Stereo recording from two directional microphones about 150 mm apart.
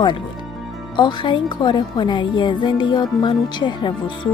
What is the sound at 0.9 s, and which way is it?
Speech, 30° left (ahead or behind).